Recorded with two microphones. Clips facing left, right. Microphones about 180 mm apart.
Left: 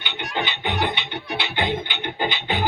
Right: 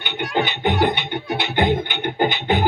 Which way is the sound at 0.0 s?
50° right (ahead or behind).